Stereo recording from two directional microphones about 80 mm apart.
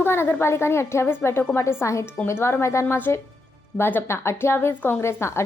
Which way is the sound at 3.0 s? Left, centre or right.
Left.